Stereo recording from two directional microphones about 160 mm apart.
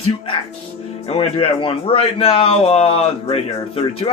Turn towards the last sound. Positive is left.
turn(degrees=35)  # may be behind; listen again after turning